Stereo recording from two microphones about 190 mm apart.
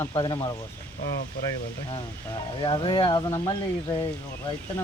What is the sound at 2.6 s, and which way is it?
Speech, 25° left (ahead or behind).